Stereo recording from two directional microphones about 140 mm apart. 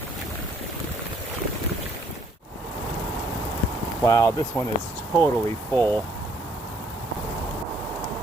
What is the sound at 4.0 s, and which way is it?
Speech, 20° left (ahead or behind).